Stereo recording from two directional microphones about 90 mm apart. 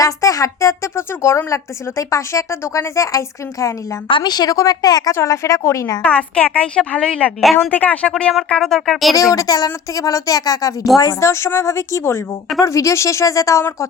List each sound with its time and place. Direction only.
0.0 s a woman's voice: 40° left (ahead or behind)
4.1 s a woman's voice: 50° left (ahead or behind)
5.1 s a woman's voice: 35° left (ahead or behind)
6.0 s a woman's voice: 15° left (ahead or behind)
8.4 s music: 5° left (ahead or behind)
9.1 s a woman's voice: 40° left (ahead or behind)
11.3 s a woman's voice: 30° left (ahead or behind)